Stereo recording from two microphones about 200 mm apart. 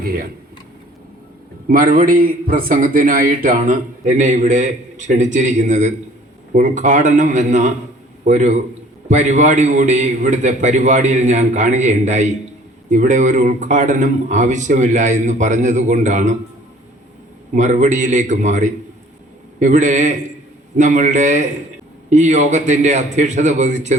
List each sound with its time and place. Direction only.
0.0 s speech: 50° right (ahead or behind)
1.6 s a man's voice: 45° right (ahead or behind)
17.5 s a man's voice: 35° right (ahead or behind)